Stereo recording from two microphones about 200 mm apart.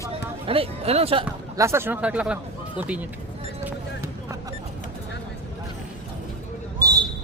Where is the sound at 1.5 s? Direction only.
15° right (ahead or behind).